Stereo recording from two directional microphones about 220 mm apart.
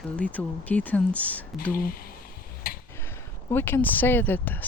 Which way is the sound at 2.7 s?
40° left (ahead or behind).